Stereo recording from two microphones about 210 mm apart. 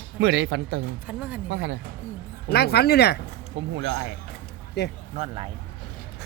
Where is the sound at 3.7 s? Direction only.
60° right (ahead or behind).